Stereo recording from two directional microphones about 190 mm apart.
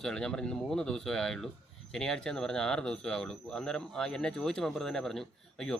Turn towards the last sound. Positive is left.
turn(degrees=5)  # may be behind; listen again after turning